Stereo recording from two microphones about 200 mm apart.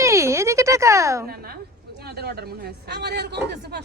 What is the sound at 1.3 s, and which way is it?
A man's voice, 50° right (ahead or behind).